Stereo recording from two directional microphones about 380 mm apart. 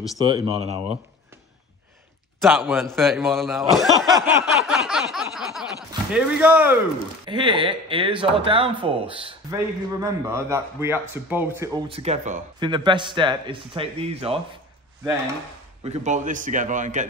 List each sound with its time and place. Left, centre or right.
0.2 s a man's voice: centre
2.4 s a man's voice: centre
15.8 s a man's voice: centre